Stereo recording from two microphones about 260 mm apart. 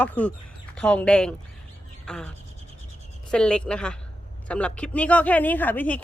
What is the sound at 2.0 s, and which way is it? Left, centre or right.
Bird, centre.